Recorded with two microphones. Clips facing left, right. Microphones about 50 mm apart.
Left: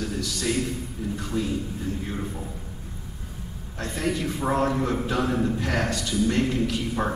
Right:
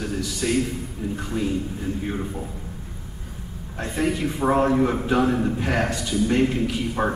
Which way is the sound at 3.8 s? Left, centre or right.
Centre.